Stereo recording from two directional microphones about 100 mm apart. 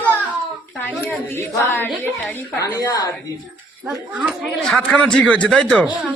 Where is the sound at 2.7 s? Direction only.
35° left (ahead or behind).